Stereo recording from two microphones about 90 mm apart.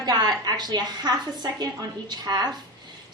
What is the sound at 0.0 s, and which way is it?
A woman's voice, 50° right (ahead or behind).